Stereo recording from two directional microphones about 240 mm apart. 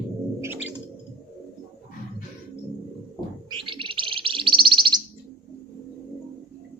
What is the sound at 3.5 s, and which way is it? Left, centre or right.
Bird, centre.